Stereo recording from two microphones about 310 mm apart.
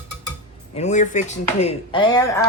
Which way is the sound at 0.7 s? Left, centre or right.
Left.